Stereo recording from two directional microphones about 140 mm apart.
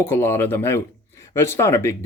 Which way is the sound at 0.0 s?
15° left (ahead or behind).